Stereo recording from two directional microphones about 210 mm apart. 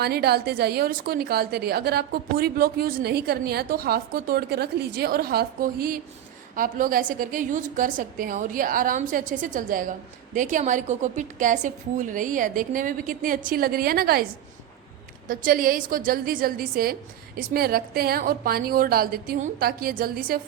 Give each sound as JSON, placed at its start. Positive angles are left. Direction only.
{"t": 0.0, "sound": "a woman's voice", "side_deg": -50}
{"t": 15.3, "sound": "a woman's voice", "side_deg": -40}